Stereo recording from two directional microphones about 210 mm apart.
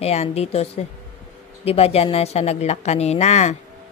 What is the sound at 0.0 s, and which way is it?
Speech, 30° left (ahead or behind).